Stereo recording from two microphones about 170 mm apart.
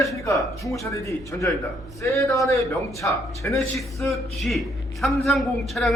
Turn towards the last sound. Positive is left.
turn(degrees=0)  # may be behind; listen again after turning